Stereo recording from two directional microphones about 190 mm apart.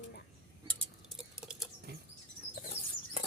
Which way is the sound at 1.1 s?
Centre (ahead or behind).